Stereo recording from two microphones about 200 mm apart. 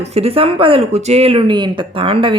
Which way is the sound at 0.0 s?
30° right (ahead or behind).